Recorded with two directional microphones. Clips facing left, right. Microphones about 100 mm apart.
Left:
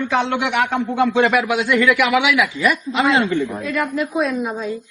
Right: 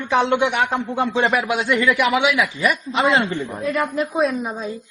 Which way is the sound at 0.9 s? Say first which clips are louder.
Left 5 dB; 35° right (ahead or behind).